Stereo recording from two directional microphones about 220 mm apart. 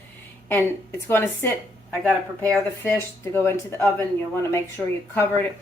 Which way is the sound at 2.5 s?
10° left (ahead or behind).